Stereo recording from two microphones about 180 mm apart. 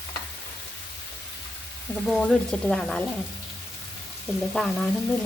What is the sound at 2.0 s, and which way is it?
Speech, 5° left (ahead or behind).